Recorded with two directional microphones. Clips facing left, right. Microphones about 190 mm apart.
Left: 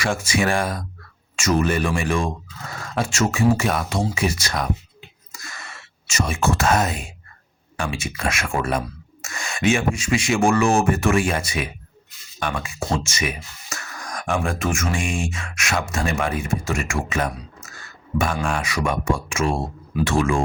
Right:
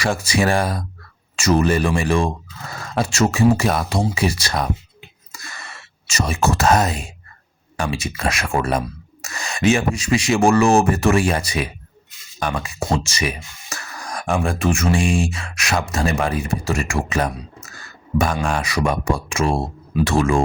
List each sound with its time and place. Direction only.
0.0 s speech: 35° right (ahead or behind)
6.1 s speech: 35° right (ahead or behind)
18.4 s speech: 35° right (ahead or behind)